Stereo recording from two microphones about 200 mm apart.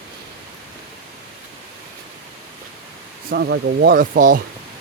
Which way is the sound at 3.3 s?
55° right (ahead or behind).